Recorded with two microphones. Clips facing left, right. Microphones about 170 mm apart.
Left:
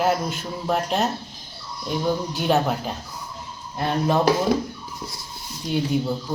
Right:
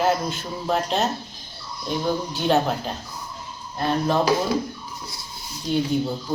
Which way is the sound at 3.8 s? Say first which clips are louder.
Even; 15° left (ahead or behind).